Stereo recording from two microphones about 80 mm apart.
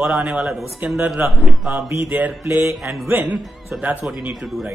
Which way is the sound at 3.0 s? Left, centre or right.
Right.